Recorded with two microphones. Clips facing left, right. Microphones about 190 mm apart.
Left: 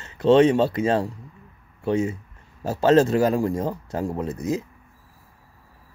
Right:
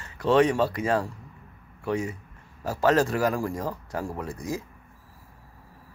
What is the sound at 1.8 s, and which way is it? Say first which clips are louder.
A man's voice: left 5 dB; 25° left (ahead or behind).